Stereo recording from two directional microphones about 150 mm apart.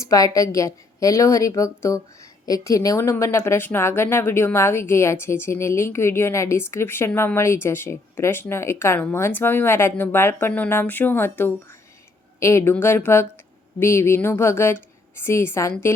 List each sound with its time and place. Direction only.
0.0 s a woman's voice: 20° left (ahead or behind)